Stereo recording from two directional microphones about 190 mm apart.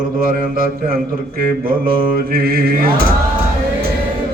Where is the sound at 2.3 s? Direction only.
50° right (ahead or behind).